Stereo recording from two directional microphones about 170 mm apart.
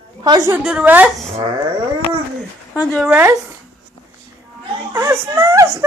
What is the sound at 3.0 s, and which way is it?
Speech, 10° right (ahead or behind).